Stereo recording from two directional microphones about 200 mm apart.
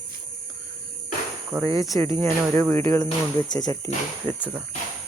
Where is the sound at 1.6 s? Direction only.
15° left (ahead or behind).